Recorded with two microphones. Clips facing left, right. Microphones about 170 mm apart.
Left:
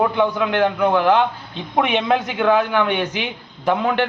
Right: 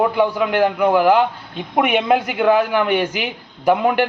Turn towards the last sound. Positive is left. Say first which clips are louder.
# right 3 dB
turn(degrees=-10)  # may be behind; listen again after turning